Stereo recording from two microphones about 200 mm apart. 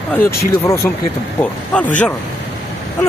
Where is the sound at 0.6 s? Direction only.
15° left (ahead or behind).